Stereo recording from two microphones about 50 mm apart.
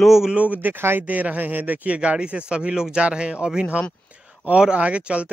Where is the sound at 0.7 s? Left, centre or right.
Right.